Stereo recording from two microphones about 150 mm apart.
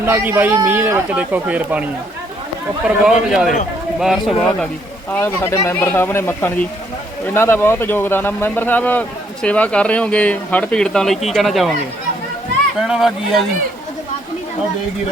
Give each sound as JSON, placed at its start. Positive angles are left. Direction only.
{"t": 0.0, "sound": "speech", "side_deg": -15}
{"t": 3.0, "sound": "speech", "side_deg": 0}
{"t": 5.1, "sound": "speech", "side_deg": 15}
{"t": 12.8, "sound": "speech", "side_deg": 0}